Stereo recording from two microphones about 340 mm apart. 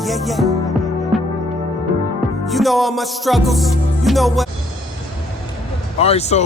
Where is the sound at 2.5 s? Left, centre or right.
Centre.